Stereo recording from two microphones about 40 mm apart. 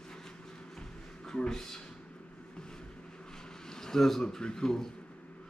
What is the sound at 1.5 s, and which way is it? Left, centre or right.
Speech, centre.